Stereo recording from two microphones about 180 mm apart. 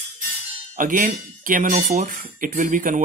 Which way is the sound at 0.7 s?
50° right (ahead or behind).